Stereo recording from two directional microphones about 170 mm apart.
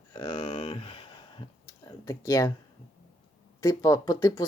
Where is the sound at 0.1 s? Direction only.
30° left (ahead or behind).